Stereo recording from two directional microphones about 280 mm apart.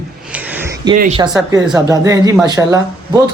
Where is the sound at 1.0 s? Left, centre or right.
Right.